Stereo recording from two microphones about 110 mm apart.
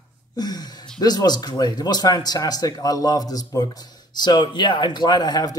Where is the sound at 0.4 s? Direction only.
40° left (ahead or behind).